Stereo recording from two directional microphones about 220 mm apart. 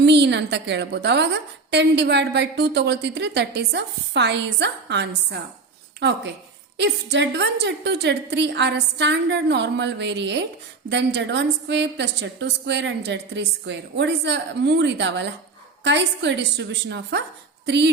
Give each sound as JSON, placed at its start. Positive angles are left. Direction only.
{"t": 0.0, "sound": "a woman's voice", "side_deg": -50}